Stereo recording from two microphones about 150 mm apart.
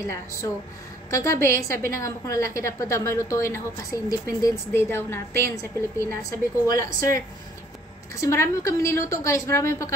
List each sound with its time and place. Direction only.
0.0 s a woman's voice: 20° left (ahead or behind)
6.9 s speech: 70° right (ahead or behind)
8.2 s a woman's voice: 20° left (ahead or behind)